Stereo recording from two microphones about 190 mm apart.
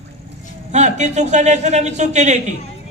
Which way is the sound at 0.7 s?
35° right (ahead or behind).